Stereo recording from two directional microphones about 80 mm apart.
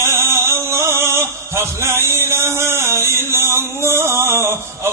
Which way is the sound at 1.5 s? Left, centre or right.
Right.